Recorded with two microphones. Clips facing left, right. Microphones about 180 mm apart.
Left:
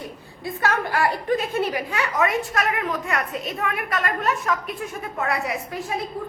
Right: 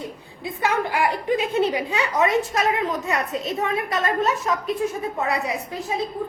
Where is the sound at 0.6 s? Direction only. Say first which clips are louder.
Right 1 dB; 15° right (ahead or behind).